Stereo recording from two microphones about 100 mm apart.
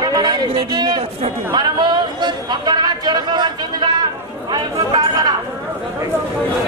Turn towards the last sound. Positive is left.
turn(degrees=-45)  # may be behind; listen again after turning